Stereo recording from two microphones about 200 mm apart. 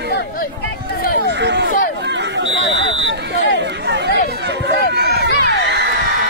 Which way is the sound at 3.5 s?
60° right (ahead or behind).